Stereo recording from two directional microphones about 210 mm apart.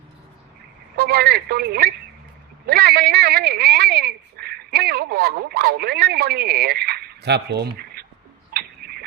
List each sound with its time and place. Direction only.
0.9 s telephone: 50° right (ahead or behind)
2.6 s speech: 45° right (ahead or behind)
8.5 s a sound: 45° right (ahead or behind)